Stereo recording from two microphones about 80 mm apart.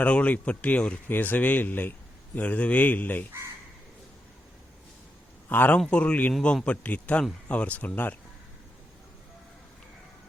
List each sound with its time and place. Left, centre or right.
0.0 s speech: centre
5.5 s speech: left